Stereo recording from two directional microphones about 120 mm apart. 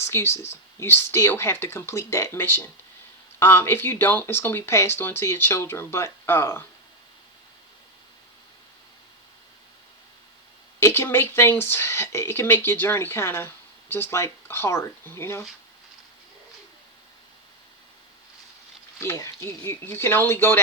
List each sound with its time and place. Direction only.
0.0 s speech: 20° left (ahead or behind)
10.8 s speech: 20° left (ahead or behind)
18.9 s speech: 25° left (ahead or behind)